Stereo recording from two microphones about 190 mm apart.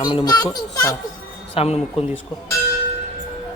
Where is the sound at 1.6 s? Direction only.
30° left (ahead or behind).